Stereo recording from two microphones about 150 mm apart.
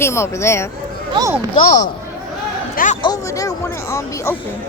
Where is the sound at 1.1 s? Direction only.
30° right (ahead or behind).